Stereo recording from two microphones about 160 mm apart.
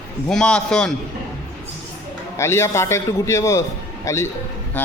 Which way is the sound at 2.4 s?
15° left (ahead or behind).